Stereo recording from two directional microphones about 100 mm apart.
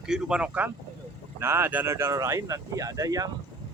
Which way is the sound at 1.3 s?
25° right (ahead or behind).